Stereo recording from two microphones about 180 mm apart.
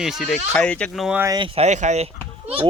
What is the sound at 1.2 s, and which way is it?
Speech, 20° right (ahead or behind).